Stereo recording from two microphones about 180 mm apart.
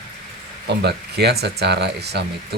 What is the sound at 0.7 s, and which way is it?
Speech, 65° right (ahead or behind).